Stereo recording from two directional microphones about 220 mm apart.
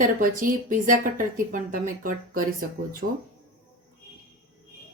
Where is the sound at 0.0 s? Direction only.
40° right (ahead or behind).